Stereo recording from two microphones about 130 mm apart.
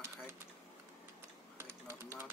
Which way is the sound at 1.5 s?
20° right (ahead or behind).